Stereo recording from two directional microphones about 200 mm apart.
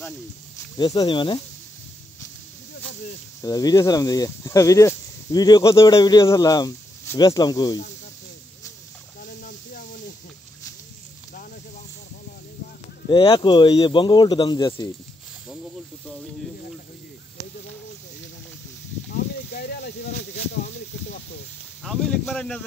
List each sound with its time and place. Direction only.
0.7 s speech: 20° left (ahead or behind)
3.3 s speech: 15° left (ahead or behind)
13.1 s speech: 25° left (ahead or behind)
19.1 s a sound: 50° left (ahead or behind)
21.8 s speech: centre (ahead or behind)